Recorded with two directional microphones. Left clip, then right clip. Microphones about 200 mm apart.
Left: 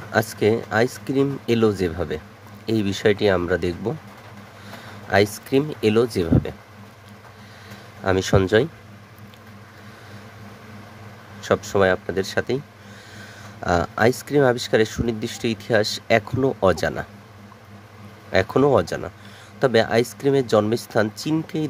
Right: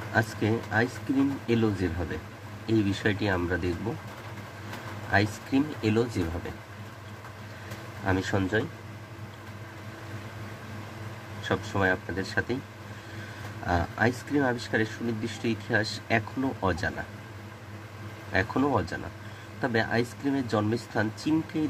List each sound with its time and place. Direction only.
0.1 s speech: 55° left (ahead or behind)
5.1 s speech: 55° left (ahead or behind)
8.0 s speech: 55° left (ahead or behind)
11.4 s speech: 55° left (ahead or behind)
13.7 s speech: 55° left (ahead or behind)
18.3 s speech: 55° left (ahead or behind)